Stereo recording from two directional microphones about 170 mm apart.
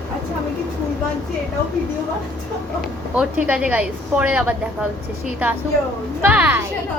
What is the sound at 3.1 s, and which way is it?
A woman's voice, 5° right (ahead or behind).